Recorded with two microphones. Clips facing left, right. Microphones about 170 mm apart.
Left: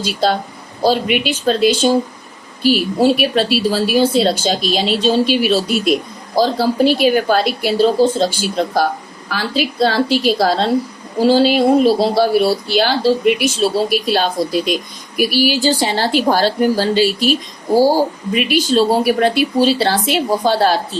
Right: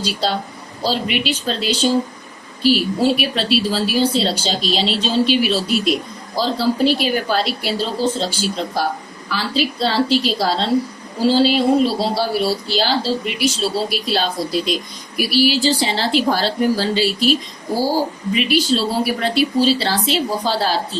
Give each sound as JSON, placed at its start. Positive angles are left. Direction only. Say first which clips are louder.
{"t": 0.0, "sound": "speech", "louder": "left 4 dB", "side_deg": 55}
{"t": 18.3, "sound": "speech", "louder": "left 4 dB", "side_deg": 50}